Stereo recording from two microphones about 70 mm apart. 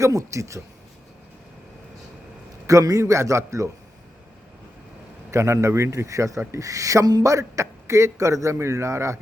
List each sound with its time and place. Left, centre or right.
0.0 s a man's voice: right
2.6 s a man's voice: right
5.3 s a man's voice: right